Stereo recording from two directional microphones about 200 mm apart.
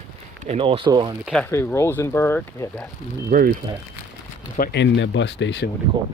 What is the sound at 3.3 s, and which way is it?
Speech, 45° right (ahead or behind).